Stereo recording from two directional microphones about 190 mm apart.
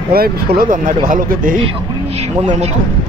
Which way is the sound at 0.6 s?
45° right (ahead or behind).